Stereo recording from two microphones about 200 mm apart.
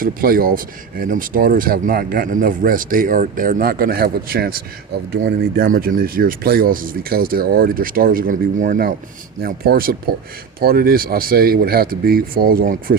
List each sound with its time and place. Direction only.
0.0 s speech: 45° right (ahead or behind)